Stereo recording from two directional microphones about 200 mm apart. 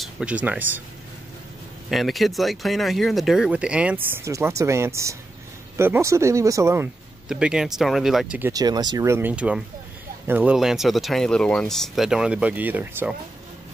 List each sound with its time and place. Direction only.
0.0 s speech: 5° right (ahead or behind)
1.9 s speech: centre (ahead or behind)